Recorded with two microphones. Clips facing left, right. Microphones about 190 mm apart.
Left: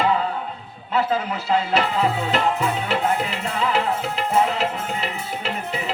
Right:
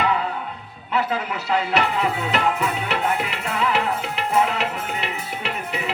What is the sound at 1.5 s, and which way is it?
Music, 30° left (ahead or behind).